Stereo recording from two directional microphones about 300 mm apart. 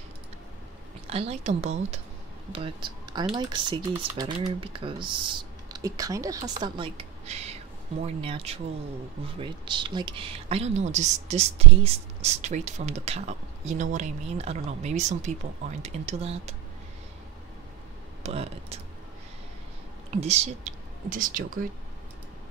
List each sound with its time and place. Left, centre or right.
1.1 s speech: right
18.2 s speech: right
20.2 s speech: right